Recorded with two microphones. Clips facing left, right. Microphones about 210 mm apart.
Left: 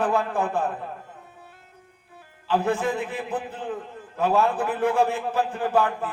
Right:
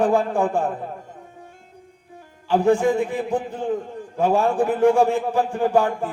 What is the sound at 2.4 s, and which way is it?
A man's voice, 15° right (ahead or behind).